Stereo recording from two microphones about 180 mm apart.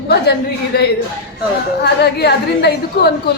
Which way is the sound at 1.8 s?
65° left (ahead or behind).